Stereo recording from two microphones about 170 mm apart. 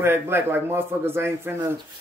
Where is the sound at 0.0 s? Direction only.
15° right (ahead or behind).